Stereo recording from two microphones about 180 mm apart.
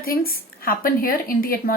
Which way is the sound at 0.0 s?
55° left (ahead or behind).